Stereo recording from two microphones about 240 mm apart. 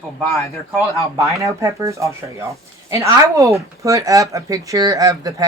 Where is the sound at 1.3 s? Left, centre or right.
Centre.